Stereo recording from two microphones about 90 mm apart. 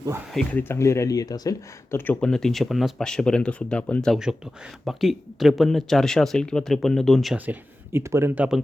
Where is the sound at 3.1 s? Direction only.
10° left (ahead or behind).